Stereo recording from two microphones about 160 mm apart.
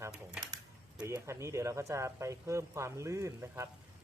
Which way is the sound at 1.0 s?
15° right (ahead or behind).